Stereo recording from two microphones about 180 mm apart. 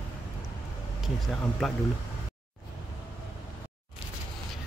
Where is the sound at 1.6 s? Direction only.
Centre (ahead or behind).